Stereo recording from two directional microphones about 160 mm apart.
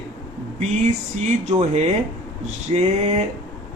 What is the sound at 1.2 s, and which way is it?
Speech, 45° right (ahead or behind).